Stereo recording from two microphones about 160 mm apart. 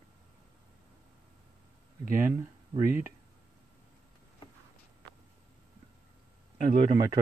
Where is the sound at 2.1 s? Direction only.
60° right (ahead or behind).